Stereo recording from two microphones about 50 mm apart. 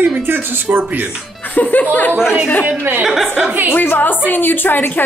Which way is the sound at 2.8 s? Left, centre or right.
Right.